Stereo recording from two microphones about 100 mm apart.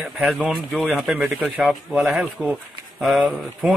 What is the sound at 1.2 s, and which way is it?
Speech, 20° right (ahead or behind).